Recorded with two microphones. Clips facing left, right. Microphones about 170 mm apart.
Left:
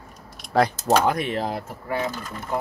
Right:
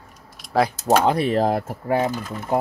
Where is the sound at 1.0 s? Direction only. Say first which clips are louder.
Right 5 dB; 30° right (ahead or behind); by 2.0 s 45° right (ahead or behind).